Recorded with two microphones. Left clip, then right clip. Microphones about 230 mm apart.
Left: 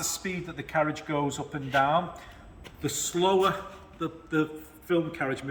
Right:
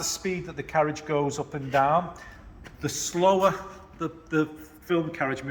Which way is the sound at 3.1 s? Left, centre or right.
Centre.